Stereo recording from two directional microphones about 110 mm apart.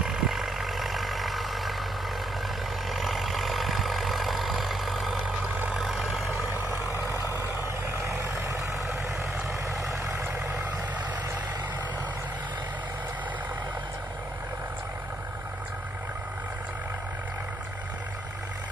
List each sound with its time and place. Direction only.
0.0 s vehicle: 5° right (ahead or behind)
2.9 s vehicle: centre (ahead or behind)
5.5 s vehicle: 10° right (ahead or behind)
5.8 s vehicle: centre (ahead or behind)
7.3 s vehicle: 25° right (ahead or behind)